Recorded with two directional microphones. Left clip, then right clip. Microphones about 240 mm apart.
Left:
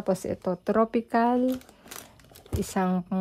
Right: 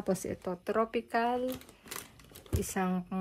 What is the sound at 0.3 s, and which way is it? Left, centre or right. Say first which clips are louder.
Speech: left 7 dB; left.